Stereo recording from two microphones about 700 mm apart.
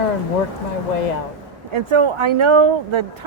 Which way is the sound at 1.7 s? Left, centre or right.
Right.